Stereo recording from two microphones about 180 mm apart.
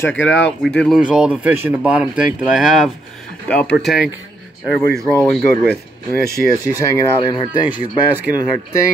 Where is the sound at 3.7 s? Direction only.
5° right (ahead or behind).